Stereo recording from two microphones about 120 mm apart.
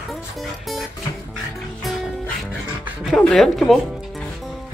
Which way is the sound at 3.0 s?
Centre (ahead or behind).